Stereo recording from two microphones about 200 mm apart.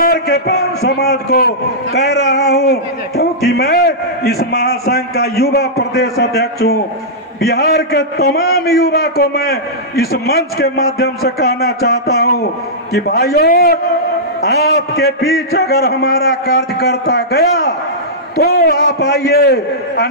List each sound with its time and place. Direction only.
0.0 s a man's voice: 50° left (ahead or behind)